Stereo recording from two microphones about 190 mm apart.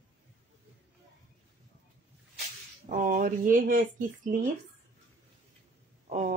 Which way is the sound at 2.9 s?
45° right (ahead or behind).